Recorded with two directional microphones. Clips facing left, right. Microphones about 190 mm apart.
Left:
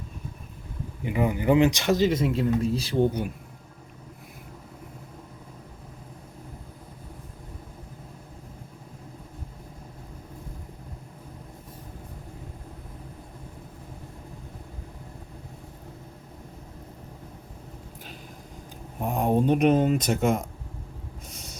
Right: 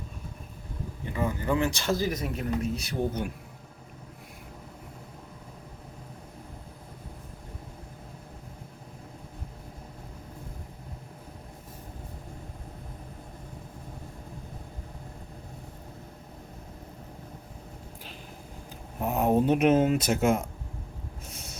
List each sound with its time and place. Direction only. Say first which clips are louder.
1.0 s speech: left 6 dB; 15° left (ahead or behind)
3.1 s speech: left 2 dB; 10° left (ahead or behind)
18.9 s speech: even; 5° right (ahead or behind)
21.2 s snort: even; 5° right (ahead or behind)